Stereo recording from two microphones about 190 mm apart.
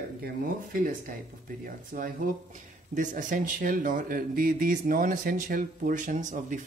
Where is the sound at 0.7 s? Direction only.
50° right (ahead or behind).